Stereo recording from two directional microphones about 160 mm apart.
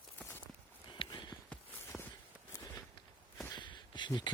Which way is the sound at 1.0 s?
30° left (ahead or behind).